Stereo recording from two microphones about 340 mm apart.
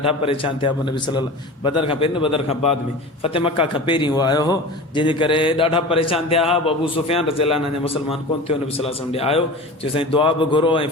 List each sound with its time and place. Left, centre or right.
0.0 s a man's voice: centre